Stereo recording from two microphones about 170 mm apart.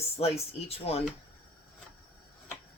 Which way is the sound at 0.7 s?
35° left (ahead or behind).